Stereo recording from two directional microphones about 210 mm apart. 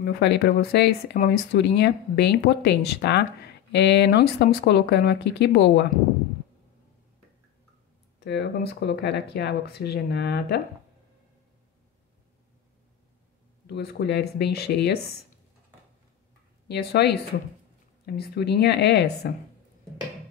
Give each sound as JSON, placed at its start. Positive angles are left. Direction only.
{"t": 0.0, "sound": "speech", "side_deg": 50}
{"t": 8.2, "sound": "speech", "side_deg": 55}
{"t": 13.7, "sound": "speech", "side_deg": 50}
{"t": 16.6, "sound": "speech", "side_deg": 50}